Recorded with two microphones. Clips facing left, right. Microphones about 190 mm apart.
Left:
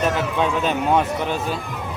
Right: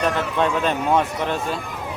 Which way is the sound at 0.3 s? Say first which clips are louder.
Even; 5° left (ahead or behind).